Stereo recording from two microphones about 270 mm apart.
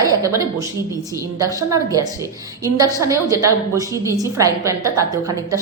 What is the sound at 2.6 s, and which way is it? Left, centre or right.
A woman's voice, centre.